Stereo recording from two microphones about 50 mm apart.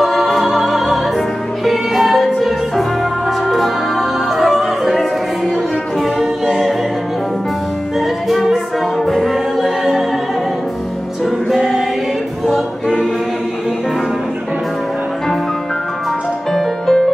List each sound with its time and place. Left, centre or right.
0.0 s music: centre
3.4 s music: centre
6.1 s music: centre
8.3 s music: centre
11.2 s music: centre
12.4 s a capella: centre
16.5 s music: centre